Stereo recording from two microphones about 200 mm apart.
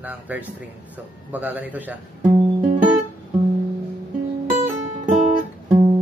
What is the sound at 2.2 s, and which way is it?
Music, 35° right (ahead or behind).